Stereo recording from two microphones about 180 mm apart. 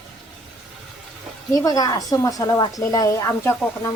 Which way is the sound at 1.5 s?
20° left (ahead or behind).